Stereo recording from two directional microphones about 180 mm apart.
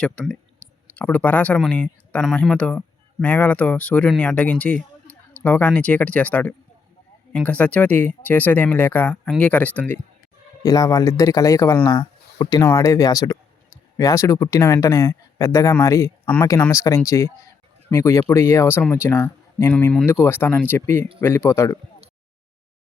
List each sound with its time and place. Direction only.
0.0 s speech: 5° left (ahead or behind)